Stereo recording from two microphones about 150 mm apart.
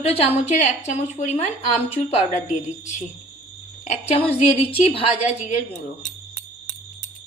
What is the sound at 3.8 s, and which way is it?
Speech, 55° left (ahead or behind).